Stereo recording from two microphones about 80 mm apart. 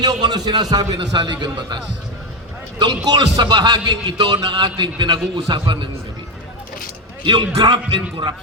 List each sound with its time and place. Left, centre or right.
0.0 s a man's voice: right
0.9 s speech: right
7.3 s music: right